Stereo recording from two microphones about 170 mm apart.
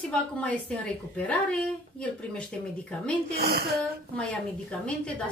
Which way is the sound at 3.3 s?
70° right (ahead or behind).